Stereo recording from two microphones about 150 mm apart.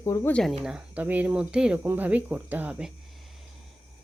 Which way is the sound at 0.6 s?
5° right (ahead or behind).